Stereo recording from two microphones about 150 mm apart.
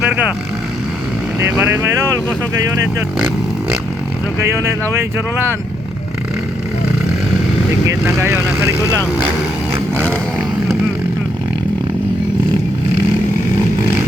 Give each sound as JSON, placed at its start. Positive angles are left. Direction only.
{"t": 0.0, "sound": "vehicle", "side_deg": -10}
{"t": 1.4, "sound": "speech", "side_deg": -10}
{"t": 7.9, "sound": "speech", "side_deg": -15}
{"t": 9.9, "sound": "a sound", "side_deg": 10}